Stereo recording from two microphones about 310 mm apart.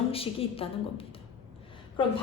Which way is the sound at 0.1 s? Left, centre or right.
Centre.